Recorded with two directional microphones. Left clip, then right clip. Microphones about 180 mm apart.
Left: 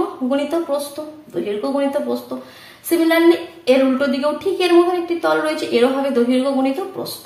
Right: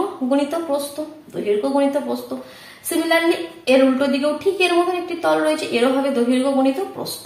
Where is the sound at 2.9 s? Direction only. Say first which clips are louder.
Left 4 dB; 35° left (ahead or behind).